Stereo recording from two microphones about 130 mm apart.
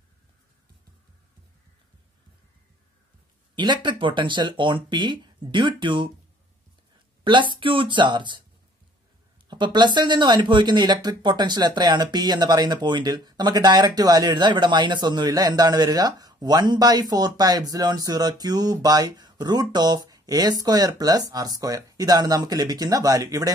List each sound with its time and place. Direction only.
3.5 s speech: 35° right (ahead or behind)
7.2 s speech: 40° right (ahead or behind)
9.5 s speech: 35° right (ahead or behind)